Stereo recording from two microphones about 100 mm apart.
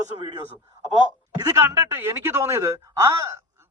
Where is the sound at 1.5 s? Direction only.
25° right (ahead or behind).